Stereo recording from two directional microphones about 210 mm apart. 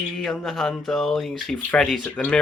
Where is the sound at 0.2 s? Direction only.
Centre (ahead or behind).